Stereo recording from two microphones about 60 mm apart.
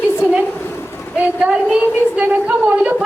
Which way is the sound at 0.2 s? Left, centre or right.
Centre.